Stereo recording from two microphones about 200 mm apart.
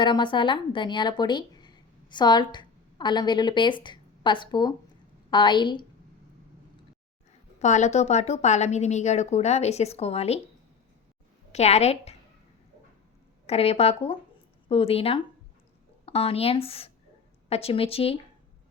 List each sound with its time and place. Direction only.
0.0 s speech: 25° left (ahead or behind)
7.6 s a woman's voice: 35° left (ahead or behind)
11.5 s a woman's voice: 35° left (ahead or behind)
13.5 s a woman's voice: 30° left (ahead or behind)